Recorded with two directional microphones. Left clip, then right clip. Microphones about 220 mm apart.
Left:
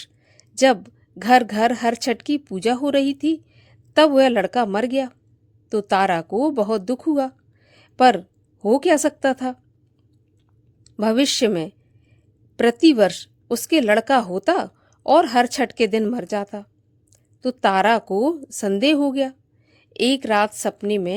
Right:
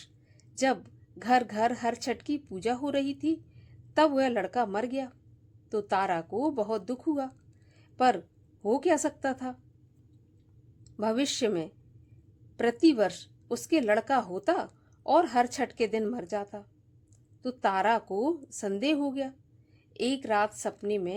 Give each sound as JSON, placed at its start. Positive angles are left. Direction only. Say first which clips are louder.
{"t": 0.0, "sound": "a woman's voice", "louder": "left 12 dB", "side_deg": 40}
{"t": 10.8, "sound": "speech", "louder": "left 10 dB", "side_deg": 40}